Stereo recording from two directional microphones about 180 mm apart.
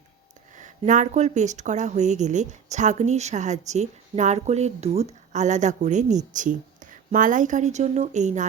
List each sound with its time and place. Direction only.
0.5 s speech: 45° right (ahead or behind)